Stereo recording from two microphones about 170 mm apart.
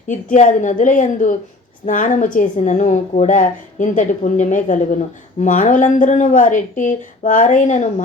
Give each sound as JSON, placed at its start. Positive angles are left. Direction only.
{"t": 0.1, "sound": "a woman's voice", "side_deg": 50}